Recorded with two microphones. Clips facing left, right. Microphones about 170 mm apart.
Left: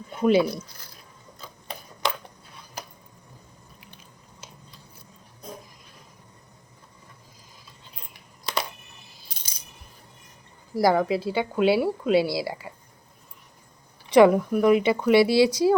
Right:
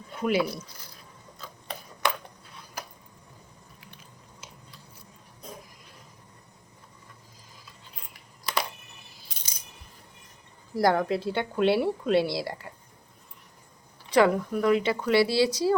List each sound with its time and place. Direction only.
0.2 s speech: 25° left (ahead or behind)
8.1 s coin: 20° left (ahead or behind)
10.8 s speech: 5° left (ahead or behind)
14.1 s speech: 20° left (ahead or behind)